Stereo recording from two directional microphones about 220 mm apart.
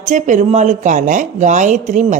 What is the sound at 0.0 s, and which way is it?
A woman's voice, 35° right (ahead or behind).